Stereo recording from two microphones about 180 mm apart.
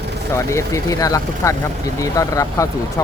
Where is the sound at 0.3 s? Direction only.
15° left (ahead or behind).